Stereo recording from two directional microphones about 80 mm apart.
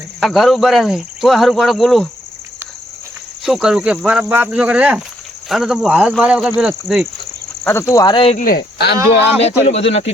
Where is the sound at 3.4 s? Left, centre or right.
Centre.